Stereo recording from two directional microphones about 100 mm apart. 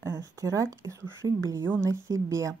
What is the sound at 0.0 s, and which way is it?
Speech, 30° right (ahead or behind).